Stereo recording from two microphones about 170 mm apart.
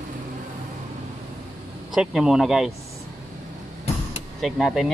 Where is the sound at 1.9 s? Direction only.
5° right (ahead or behind).